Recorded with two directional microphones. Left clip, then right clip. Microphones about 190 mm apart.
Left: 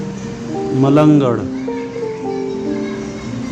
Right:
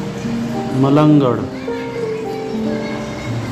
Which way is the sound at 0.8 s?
30° left (ahead or behind).